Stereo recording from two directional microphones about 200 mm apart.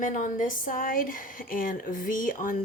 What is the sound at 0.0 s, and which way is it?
Speech, 40° left (ahead or behind).